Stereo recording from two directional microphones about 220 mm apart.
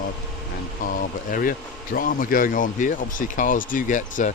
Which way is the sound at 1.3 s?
40° left (ahead or behind).